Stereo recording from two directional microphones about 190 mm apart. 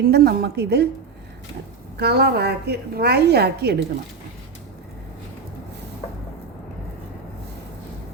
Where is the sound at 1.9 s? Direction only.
60° right (ahead or behind).